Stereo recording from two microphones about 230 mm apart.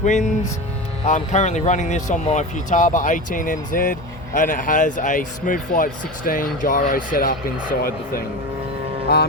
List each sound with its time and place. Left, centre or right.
0.0 s speech: left